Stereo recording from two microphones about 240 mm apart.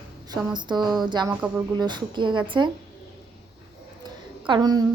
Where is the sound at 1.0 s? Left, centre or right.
Centre.